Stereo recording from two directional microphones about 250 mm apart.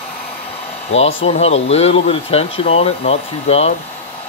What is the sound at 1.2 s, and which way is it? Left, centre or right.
Speech, left.